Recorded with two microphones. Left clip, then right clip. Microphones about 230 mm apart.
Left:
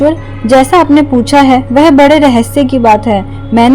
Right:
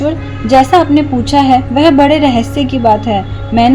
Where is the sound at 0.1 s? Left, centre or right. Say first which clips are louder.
Left 2 dB; left.